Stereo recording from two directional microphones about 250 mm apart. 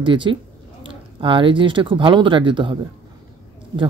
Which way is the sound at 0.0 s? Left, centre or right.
Centre.